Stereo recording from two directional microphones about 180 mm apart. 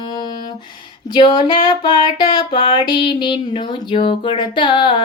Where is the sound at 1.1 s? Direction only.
25° left (ahead or behind).